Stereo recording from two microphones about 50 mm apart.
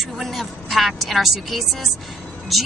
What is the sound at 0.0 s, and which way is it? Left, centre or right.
A woman's voice, centre.